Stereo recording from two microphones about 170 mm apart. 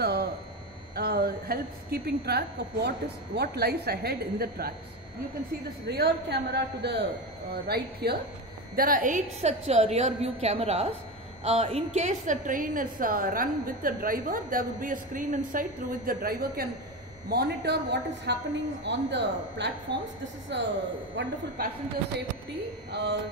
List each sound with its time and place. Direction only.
0.0 s a sound: 65° right (ahead or behind)
0.9 s a woman's voice: 65° right (ahead or behind)
5.9 s a man's voice: 75° right (ahead or behind)
7.5 s a woman's voice: 65° right (ahead or behind)
8.7 s a woman's voice: 55° right (ahead or behind)
17.3 s a woman's voice: 75° right (ahead or behind)
18.9 s speech: 90° right
22.8 s a sound: 80° right